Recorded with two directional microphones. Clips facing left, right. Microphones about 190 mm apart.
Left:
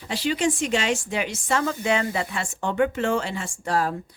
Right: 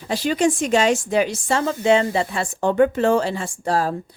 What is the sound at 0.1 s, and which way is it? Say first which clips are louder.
Speech: right 4 dB; 45° right (ahead or behind).